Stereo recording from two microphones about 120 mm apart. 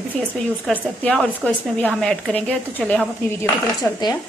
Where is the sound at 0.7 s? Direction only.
5° left (ahead or behind).